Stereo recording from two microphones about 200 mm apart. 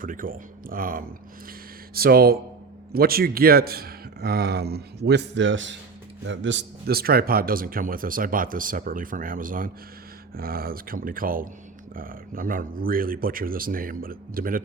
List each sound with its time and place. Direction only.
0.0 s speech: 45° right (ahead or behind)